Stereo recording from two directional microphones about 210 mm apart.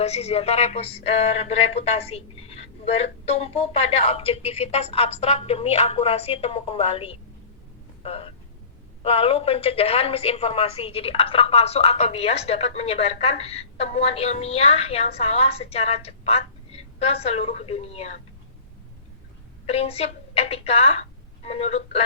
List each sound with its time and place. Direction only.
0.0 s a woman's voice: 30° left (ahead or behind)
19.6 s a woman's voice: 30° left (ahead or behind)